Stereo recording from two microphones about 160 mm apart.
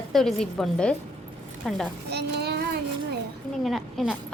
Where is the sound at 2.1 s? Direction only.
90° right.